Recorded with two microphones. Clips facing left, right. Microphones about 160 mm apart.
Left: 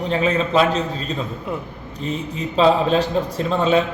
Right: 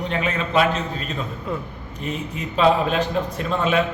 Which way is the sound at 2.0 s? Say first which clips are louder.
Left 3 dB; 30° left (ahead or behind).